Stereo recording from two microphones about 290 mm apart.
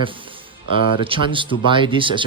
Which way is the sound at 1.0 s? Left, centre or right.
Centre.